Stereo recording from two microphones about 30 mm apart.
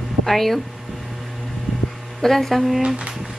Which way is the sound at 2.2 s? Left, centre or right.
Centre.